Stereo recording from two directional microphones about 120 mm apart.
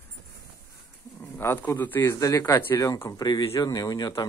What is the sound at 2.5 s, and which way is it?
Speech, 20° left (ahead or behind).